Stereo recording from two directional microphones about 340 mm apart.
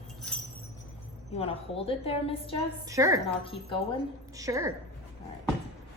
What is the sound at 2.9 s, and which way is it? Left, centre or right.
Speech, centre.